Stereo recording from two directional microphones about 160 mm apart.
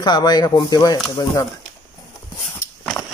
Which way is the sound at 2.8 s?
5° left (ahead or behind).